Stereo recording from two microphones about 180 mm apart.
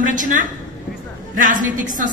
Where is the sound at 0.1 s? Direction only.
45° right (ahead or behind).